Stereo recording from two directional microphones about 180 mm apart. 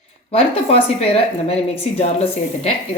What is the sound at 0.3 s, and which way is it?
A woman's voice, 35° left (ahead or behind).